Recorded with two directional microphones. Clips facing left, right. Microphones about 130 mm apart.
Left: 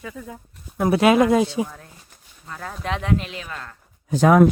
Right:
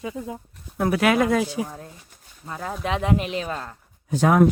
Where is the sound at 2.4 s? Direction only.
15° right (ahead or behind).